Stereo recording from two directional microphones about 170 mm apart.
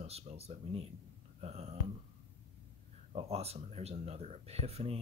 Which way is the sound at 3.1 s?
35° right (ahead or behind).